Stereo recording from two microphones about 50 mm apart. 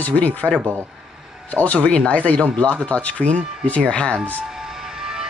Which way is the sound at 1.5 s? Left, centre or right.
Left.